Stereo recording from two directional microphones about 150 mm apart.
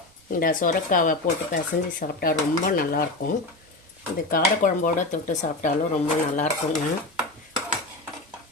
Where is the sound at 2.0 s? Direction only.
90° left.